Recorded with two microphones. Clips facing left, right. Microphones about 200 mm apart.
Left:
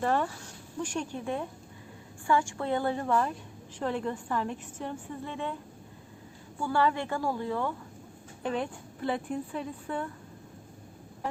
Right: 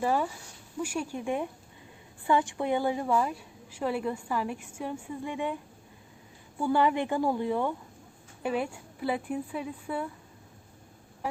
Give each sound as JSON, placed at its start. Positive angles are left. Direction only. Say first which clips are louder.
{"t": 0.0, "sound": "a woman's voice", "louder": "even", "side_deg": -10}
{"t": 6.6, "sound": "a woman's voice", "louder": "right 2 dB", "side_deg": -20}